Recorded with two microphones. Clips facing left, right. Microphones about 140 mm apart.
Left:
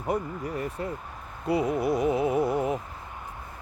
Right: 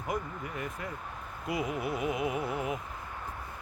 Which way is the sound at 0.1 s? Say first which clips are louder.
Left 7 dB; 35° left (ahead or behind).